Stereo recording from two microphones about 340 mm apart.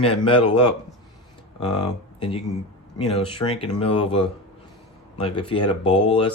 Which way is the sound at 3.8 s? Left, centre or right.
Centre.